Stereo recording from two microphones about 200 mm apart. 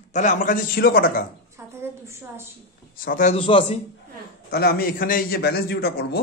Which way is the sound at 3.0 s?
45° left (ahead or behind).